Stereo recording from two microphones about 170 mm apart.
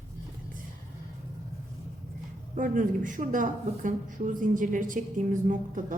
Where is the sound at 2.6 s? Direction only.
50° right (ahead or behind).